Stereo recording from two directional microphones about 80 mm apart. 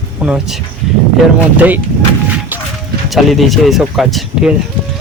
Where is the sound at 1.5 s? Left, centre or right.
Centre.